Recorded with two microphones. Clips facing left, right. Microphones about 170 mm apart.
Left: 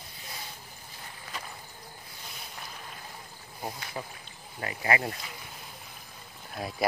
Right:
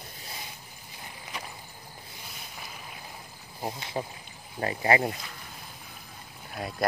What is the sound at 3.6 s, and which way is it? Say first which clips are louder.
Speech: right 4 dB; 20° right (ahead or behind).